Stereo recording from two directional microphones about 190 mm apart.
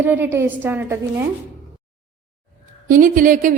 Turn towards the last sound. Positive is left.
turn(degrees=-45)  # may be behind; listen again after turning